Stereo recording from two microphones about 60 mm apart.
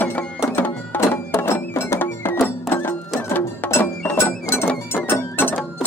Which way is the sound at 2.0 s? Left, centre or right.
Left.